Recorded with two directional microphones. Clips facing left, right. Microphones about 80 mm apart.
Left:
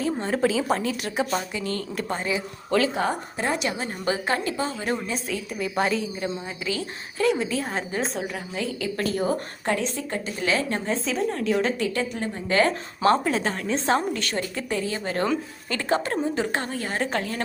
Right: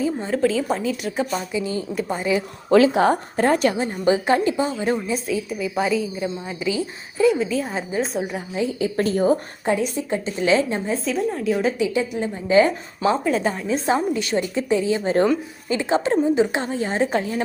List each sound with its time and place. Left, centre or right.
0.0 s speech: centre
2.9 s speech: right
3.3 s a woman's voice: right
3.8 s a woman's voice: right
5.1 s speech: centre
8.3 s a woman's voice: right
9.6 s a woman's voice: centre
10.7 s a woman's voice: centre